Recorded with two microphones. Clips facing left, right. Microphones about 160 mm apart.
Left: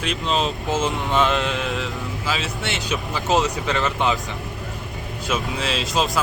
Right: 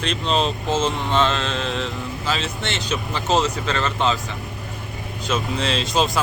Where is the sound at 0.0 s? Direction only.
5° left (ahead or behind).